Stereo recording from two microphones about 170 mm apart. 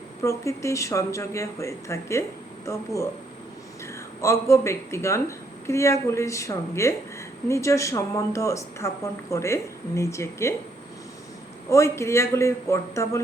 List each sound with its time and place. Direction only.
0.2 s speech: 15° left (ahead or behind)
4.2 s speech: 15° left (ahead or behind)
11.7 s speech: 15° left (ahead or behind)